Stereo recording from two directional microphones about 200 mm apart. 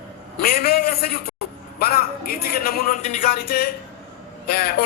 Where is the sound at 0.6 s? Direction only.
50° left (ahead or behind).